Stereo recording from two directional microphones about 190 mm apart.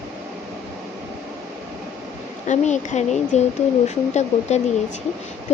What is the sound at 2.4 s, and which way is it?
Speech, 40° left (ahead or behind).